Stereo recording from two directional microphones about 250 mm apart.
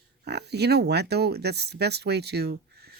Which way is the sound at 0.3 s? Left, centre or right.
Right.